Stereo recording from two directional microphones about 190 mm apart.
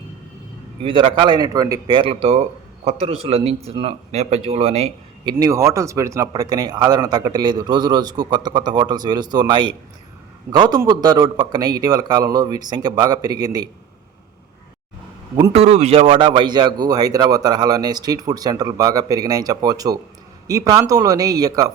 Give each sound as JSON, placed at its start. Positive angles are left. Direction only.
{"t": 0.8, "sound": "a man's voice", "side_deg": -25}
{"t": 5.3, "sound": "a man's voice", "side_deg": -15}
{"t": 15.4, "sound": "a man's voice", "side_deg": -30}